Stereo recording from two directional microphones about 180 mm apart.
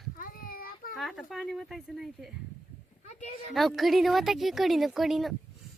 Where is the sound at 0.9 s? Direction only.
Centre (ahead or behind).